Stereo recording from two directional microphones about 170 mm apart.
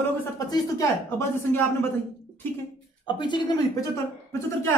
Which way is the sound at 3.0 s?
25° left (ahead or behind).